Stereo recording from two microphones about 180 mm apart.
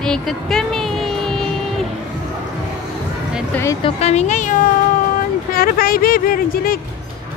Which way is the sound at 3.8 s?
35° left (ahead or behind).